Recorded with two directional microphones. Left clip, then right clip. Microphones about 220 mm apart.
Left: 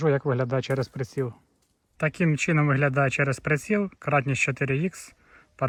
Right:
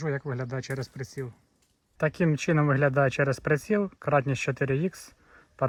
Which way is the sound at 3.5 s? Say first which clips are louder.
Even; centre (ahead or behind).